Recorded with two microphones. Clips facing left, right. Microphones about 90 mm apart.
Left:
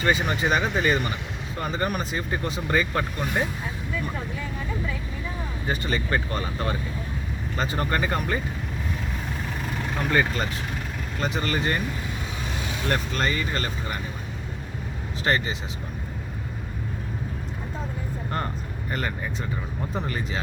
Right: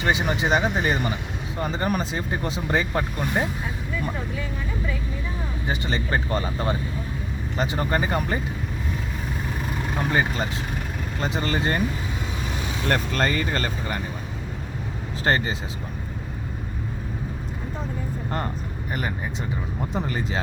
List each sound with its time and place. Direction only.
0.0 s speech: 20° right (ahead or behind)
1.6 s speech: 30° right (ahead or behind)
5.6 s speech: 30° right (ahead or behind)
7.5 s speech: 20° right (ahead or behind)
10.1 s speech: 20° right (ahead or behind)
12.9 s speech: 45° right (ahead or behind)
15.2 s speech: 35° right (ahead or behind)
18.9 s speech: 15° right (ahead or behind)
20.1 s speech: 30° right (ahead or behind)